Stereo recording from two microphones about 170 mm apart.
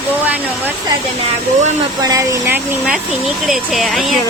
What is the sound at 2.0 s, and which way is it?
Speech, 20° right (ahead or behind).